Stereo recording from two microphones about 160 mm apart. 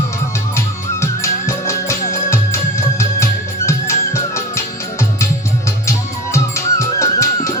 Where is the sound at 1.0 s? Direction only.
20° left (ahead or behind).